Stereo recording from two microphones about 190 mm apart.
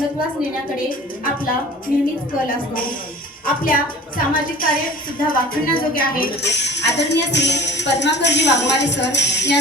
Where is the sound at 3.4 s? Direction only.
50° left (ahead or behind).